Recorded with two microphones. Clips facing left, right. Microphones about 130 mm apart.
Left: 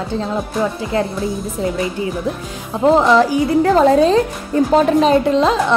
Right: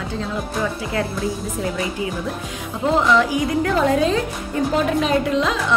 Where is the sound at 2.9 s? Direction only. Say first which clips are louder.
Left 3 dB; 35° left (ahead or behind).